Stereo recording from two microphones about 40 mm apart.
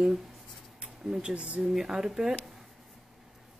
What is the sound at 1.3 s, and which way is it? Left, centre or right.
Speech, right.